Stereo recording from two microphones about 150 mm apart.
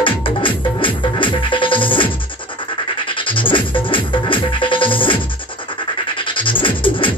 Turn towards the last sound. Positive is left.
turn(degrees=35)  # may be behind; listen again after turning